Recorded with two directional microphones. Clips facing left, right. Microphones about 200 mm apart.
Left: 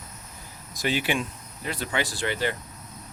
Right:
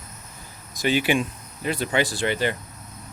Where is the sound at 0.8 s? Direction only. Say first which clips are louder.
Right 5 dB; centre (ahead or behind).